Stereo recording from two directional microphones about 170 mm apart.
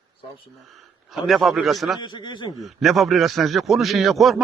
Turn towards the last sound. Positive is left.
turn(degrees=0)  # may be behind; listen again after turning